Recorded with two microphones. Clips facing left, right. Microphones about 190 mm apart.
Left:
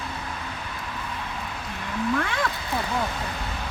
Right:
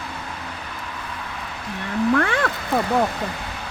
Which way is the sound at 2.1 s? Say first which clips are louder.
Right 5 dB; 85° right.